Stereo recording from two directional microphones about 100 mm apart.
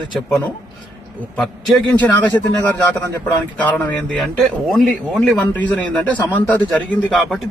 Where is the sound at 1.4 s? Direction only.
5° left (ahead or behind).